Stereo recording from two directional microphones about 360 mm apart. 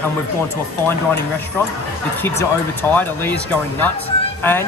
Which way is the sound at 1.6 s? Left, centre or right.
Centre.